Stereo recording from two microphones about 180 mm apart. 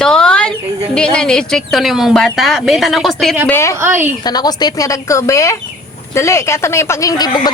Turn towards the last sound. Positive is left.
turn(degrees=20)  # may be behind; listen again after turning